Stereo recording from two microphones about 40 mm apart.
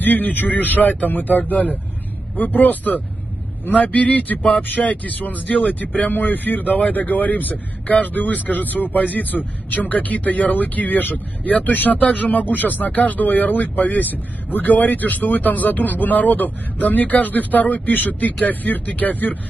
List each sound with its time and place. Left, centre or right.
0.0 s speech: left